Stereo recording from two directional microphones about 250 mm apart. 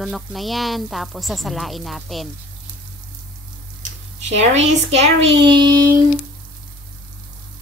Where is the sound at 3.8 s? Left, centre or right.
Right.